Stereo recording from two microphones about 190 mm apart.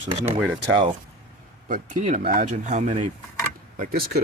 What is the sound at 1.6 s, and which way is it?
Speech, 45° right (ahead or behind).